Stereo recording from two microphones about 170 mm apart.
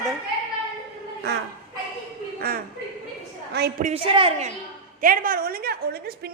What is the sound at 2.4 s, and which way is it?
A woman's voice, 60° right (ahead or behind).